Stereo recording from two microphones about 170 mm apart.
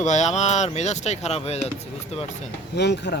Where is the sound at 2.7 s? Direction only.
85° left.